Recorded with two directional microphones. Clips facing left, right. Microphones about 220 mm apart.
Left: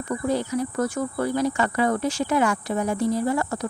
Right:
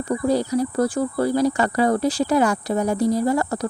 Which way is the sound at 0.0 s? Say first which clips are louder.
Right 4 dB; 35° right (ahead or behind).